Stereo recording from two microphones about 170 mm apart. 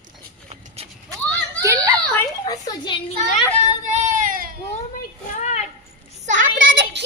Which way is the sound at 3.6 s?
40° right (ahead or behind).